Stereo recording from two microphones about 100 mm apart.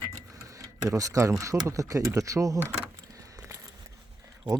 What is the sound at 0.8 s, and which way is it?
Speech, 35° right (ahead or behind).